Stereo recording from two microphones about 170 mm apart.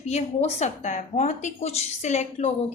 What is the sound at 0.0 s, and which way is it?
A woman's voice, 40° left (ahead or behind).